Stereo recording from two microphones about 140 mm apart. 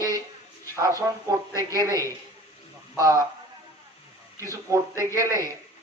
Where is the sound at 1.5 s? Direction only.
25° right (ahead or behind).